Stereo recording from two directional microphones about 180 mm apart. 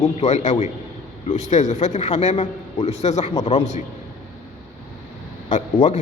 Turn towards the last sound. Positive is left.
turn(degrees=40)  # may be behind; listen again after turning